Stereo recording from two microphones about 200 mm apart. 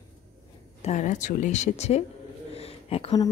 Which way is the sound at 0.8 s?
35° left (ahead or behind).